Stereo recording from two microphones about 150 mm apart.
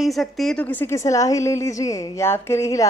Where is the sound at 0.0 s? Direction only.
Centre (ahead or behind).